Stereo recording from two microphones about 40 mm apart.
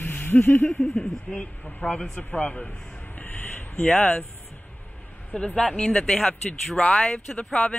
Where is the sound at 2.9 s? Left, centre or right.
Left.